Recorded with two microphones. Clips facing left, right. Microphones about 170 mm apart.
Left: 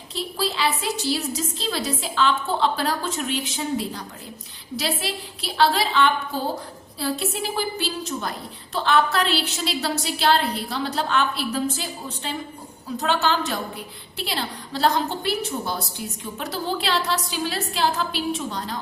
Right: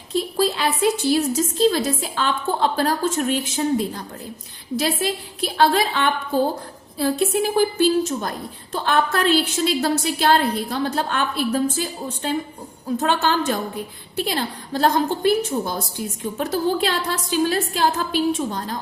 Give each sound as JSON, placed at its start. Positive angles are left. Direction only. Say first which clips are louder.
{"t": 0.1, "sound": "a woman's voice", "louder": "right 7 dB", "side_deg": -50}